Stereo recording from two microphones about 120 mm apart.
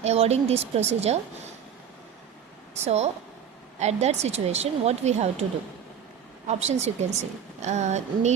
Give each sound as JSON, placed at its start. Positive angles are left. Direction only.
{"t": 0.0, "sound": "a woman's voice", "side_deg": -60}
{"t": 2.8, "sound": "a woman's voice", "side_deg": -65}
{"t": 6.5, "sound": "a woman's voice", "side_deg": -65}
{"t": 7.6, "sound": "a sound", "side_deg": -70}